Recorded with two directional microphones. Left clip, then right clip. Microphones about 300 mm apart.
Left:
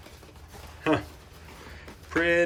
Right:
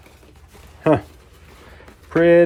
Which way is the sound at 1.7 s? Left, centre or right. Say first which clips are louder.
Right 9 dB; centre.